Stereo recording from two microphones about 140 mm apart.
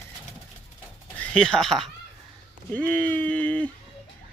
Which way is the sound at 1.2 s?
5° left (ahead or behind).